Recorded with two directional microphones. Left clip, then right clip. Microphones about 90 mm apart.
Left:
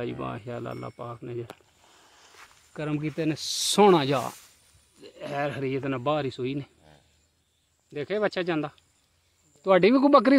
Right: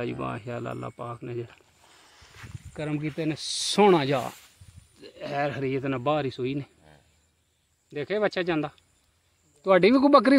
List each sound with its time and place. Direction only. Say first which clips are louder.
0.0 s speech: right 1 dB; 5° right (ahead or behind)
2.1 s a sound: right 3 dB; 15° left (ahead or behind)
2.8 s speech: left 1 dB; 25° left (ahead or behind)
3.9 s speech: even; 25° left (ahead or behind)
4.9 s speech: right 2 dB; centre (ahead or behind)
9.6 s speech: even; 15° left (ahead or behind)